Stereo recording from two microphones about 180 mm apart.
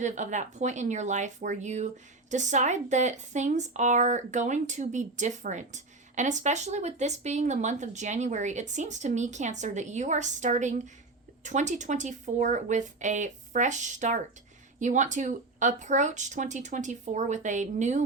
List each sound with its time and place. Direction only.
0.0 s a woman's voice: 40° right (ahead or behind)